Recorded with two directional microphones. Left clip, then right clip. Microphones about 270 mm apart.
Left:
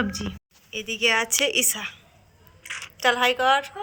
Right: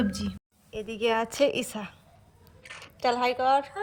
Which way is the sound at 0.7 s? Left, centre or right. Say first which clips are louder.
Left 5 dB; right.